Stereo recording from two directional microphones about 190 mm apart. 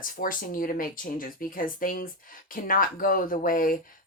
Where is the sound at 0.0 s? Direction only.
45° left (ahead or behind).